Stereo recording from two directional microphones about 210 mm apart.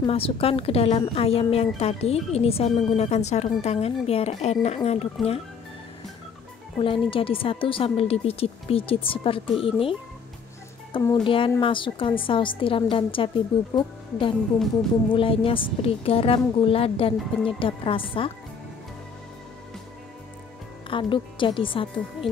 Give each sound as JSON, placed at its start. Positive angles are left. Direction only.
{"t": 0.0, "sound": "speech", "side_deg": 25}
{"t": 6.8, "sound": "speech", "side_deg": 25}
{"t": 20.9, "sound": "speech", "side_deg": 25}